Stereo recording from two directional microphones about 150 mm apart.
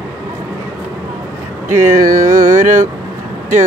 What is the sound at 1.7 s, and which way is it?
Carnatic music, 15° right (ahead or behind).